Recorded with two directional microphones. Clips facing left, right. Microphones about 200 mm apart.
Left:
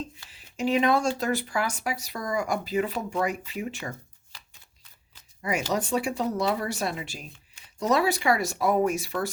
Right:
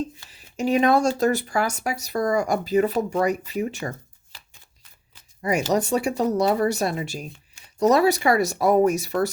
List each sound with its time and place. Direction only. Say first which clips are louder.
0.3 s speech: right 2 dB; 40° right (ahead or behind)
5.4 s speech: right 6 dB; 40° right (ahead or behind)